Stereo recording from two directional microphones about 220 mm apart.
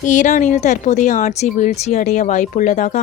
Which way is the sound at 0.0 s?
35° left (ahead or behind).